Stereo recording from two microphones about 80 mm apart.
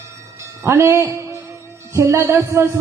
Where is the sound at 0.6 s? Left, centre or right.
Right.